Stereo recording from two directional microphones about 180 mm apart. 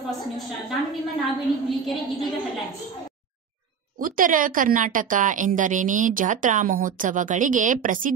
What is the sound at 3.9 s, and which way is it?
Speech, 50° right (ahead or behind).